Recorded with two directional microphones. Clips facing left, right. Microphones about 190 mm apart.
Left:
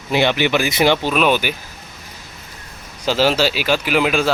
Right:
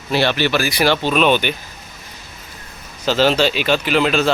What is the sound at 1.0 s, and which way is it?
Speech, 5° left (ahead or behind).